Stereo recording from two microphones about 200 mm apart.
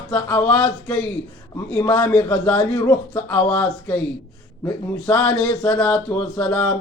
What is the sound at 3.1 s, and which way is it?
Speech, 5° left (ahead or behind).